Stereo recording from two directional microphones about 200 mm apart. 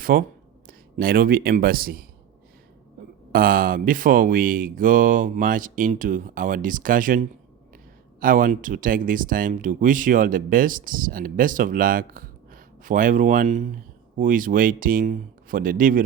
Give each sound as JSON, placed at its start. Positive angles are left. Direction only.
{"t": 0.0, "sound": "speech", "side_deg": -45}
{"t": 3.3, "sound": "speech", "side_deg": -45}